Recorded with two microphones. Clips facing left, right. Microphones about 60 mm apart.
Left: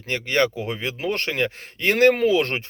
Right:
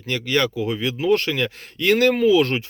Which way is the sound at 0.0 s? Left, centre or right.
Left.